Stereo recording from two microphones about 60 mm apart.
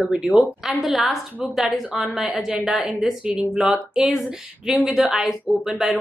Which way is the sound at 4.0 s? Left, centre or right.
Centre.